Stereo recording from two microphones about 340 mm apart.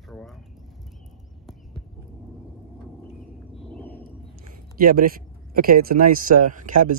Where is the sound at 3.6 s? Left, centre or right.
Centre.